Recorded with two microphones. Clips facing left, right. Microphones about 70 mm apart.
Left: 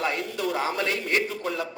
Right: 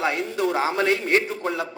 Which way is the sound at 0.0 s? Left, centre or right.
Right.